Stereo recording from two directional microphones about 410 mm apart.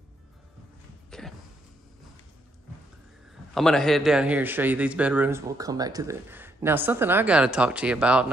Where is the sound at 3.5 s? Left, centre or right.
Centre.